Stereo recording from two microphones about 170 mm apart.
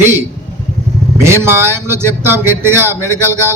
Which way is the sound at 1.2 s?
15° right (ahead or behind).